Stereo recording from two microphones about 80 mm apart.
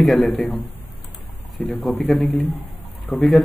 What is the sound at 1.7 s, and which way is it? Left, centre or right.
Speech, centre.